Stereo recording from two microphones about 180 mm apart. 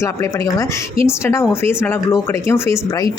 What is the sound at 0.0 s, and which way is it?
Speech, 15° left (ahead or behind).